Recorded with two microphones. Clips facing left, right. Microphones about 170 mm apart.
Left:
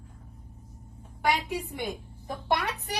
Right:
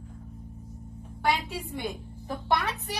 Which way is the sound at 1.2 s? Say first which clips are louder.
Left 1 dB; 15° left (ahead or behind).